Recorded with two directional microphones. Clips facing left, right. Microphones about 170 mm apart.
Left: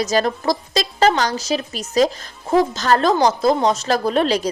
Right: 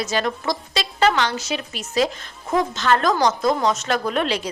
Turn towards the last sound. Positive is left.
turn(degrees=40)  # may be behind; listen again after turning